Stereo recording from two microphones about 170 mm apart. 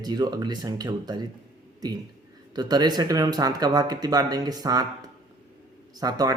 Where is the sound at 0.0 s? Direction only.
25° right (ahead or behind).